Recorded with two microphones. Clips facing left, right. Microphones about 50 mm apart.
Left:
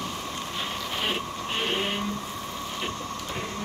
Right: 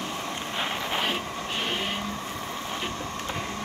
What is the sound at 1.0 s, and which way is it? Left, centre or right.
Printer, centre.